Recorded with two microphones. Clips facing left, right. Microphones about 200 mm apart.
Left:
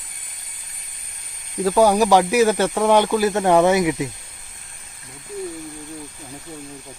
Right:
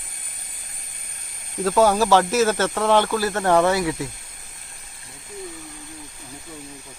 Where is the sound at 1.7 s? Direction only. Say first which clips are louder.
Left 2 dB; 15° left (ahead or behind).